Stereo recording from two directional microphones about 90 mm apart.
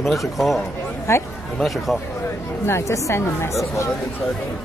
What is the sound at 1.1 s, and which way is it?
Speech, 30° left (ahead or behind).